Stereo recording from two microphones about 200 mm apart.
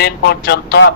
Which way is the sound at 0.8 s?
65° left (ahead or behind).